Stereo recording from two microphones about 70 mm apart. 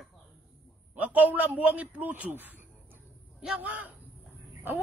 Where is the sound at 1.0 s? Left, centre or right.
Right.